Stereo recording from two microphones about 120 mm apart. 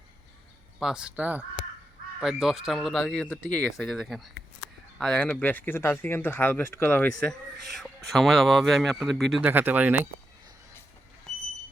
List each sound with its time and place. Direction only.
0.8 s speech: 5° right (ahead or behind); by 7.1 s 15° left (ahead or behind)
7.3 s speech: centre (ahead or behind)
9.4 s speech: 15° right (ahead or behind)